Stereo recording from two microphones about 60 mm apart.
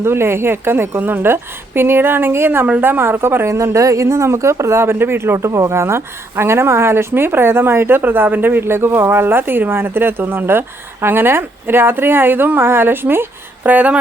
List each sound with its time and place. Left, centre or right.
0.0 s speech: right
2.6 s speech: right
13.7 s speech: right